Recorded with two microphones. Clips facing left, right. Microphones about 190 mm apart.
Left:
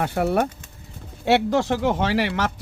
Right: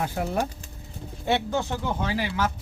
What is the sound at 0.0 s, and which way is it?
Speech, 65° left (ahead or behind).